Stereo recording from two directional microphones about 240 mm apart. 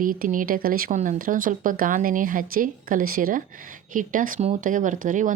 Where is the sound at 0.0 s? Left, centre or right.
Right.